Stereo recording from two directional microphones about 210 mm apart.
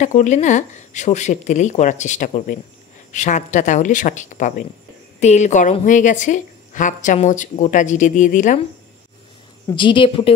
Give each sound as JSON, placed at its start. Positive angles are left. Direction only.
{"t": 0.0, "sound": "a woman's voice", "side_deg": 35}
{"t": 9.8, "sound": "a woman's voice", "side_deg": 25}